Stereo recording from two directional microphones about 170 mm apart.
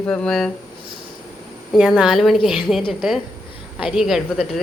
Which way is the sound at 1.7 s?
5° right (ahead or behind).